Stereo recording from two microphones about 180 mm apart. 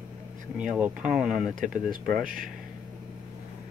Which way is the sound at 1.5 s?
50° right (ahead or behind).